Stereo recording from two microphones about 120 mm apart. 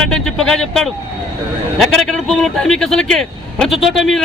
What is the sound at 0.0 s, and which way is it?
A man's voice, 5° left (ahead or behind).